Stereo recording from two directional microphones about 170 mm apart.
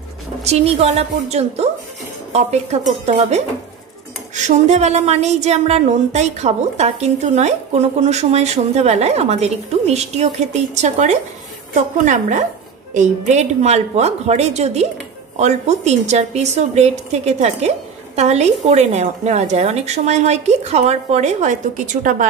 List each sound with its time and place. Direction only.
0.4 s a woman's voice: 40° right (ahead or behind)